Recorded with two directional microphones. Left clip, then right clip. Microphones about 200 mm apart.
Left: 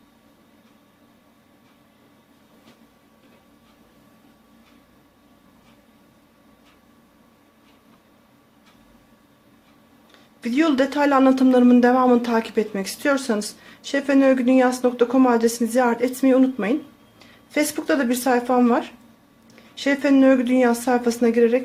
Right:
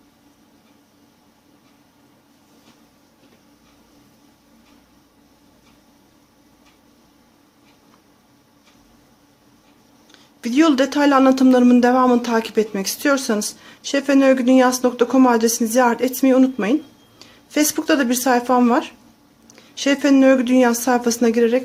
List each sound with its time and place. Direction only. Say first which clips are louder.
10.1 s speech: right 2 dB; 15° right (ahead or behind)